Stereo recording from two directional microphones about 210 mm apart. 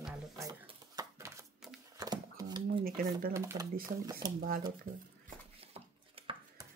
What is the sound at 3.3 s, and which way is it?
Speech, 15° right (ahead or behind).